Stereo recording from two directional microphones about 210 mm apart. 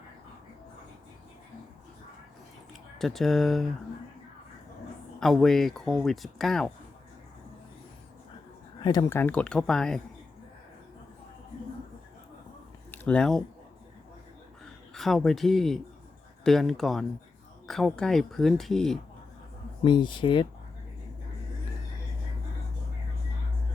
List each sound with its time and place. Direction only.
3.0 s speech: centre (ahead or behind)
5.2 s speech: centre (ahead or behind)
8.8 s speech: 20° left (ahead or behind); by 10.0 s 5° left (ahead or behind)
12.9 s speech: 5° left (ahead or behind)
14.6 s speech: centre (ahead or behind)
19.8 s speech: 25° left (ahead or behind)